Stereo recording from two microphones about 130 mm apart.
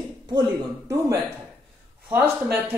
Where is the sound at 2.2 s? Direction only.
20° right (ahead or behind).